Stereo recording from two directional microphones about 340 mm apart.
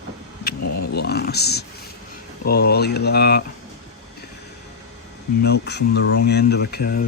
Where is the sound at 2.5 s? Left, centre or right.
Left.